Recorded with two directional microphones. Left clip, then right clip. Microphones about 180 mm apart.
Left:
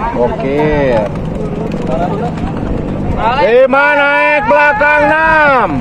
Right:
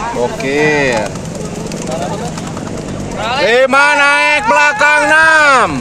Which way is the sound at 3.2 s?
20° left (ahead or behind).